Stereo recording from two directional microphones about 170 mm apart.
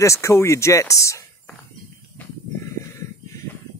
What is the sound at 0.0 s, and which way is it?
Speech, 15° left (ahead or behind).